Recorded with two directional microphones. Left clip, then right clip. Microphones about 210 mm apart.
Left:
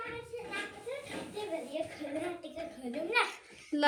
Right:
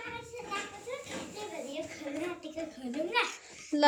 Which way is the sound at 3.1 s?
20° left (ahead or behind).